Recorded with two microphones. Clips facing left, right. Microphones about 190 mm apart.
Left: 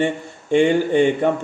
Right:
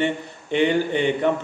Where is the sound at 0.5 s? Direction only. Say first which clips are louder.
Left 5 dB; 45° left (ahead or behind).